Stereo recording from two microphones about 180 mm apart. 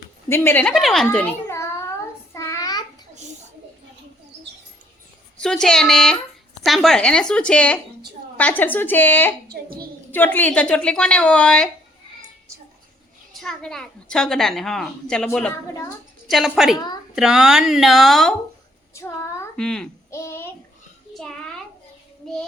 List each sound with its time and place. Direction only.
0.3 s a woman's voice: 15° left (ahead or behind)
2.3 s child singing: 15° left (ahead or behind)
5.4 s a woman's voice: 5° left (ahead or behind)
9.5 s a child's voice: 55° right (ahead or behind)
10.1 s a woman's voice: 10° left (ahead or behind)
13.4 s a woman's voice: 5° left (ahead or behind)
16.7 s speech: 25° left (ahead or behind)
17.2 s a woman's voice: 5° right (ahead or behind)
18.9 s a child's voice: 15° left (ahead or behind)
20.1 s a sound: 15° left (ahead or behind)
21.1 s a sound: centre (ahead or behind)